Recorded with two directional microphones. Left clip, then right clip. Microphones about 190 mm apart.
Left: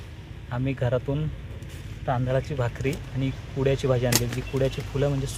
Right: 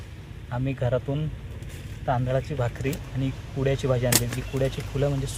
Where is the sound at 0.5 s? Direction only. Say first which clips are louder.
Even; 20° left (ahead or behind).